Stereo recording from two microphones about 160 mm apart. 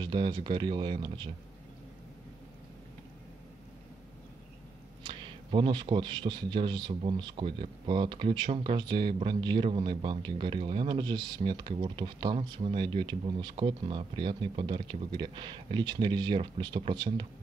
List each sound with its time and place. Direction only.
0.0 s speech: 30° right (ahead or behind)
5.0 s speech: 30° right (ahead or behind)